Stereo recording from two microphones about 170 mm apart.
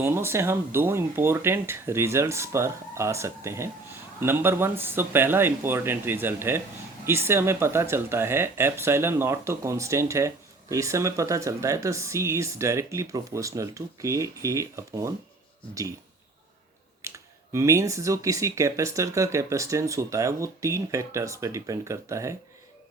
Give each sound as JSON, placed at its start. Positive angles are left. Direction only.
{"t": 0.0, "sound": "speech", "side_deg": -15}
{"t": 17.0, "sound": "a sound", "side_deg": -15}
{"t": 17.5, "sound": "speech", "side_deg": -15}